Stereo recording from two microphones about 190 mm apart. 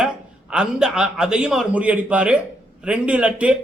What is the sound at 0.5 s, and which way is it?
Speech, 5° right (ahead or behind).